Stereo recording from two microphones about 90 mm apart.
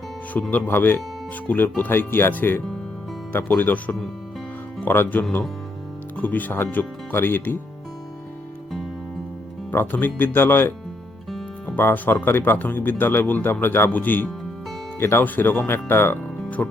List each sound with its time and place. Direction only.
0.5 s speech: 20° left (ahead or behind)
9.7 s speech: 20° left (ahead or behind)
11.7 s speech: 25° left (ahead or behind)